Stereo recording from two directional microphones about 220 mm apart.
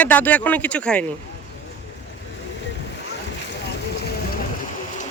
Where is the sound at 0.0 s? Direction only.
5° left (ahead or behind).